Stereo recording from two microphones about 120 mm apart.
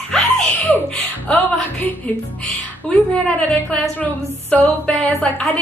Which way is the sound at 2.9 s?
10° left (ahead or behind).